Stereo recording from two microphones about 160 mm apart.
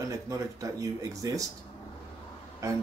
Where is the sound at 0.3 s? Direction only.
20° right (ahead or behind).